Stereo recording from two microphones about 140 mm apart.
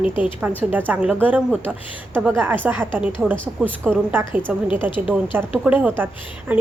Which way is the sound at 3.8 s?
15° right (ahead or behind).